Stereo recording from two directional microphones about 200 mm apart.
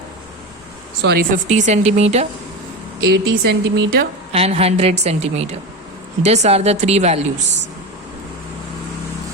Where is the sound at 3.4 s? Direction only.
50° right (ahead or behind).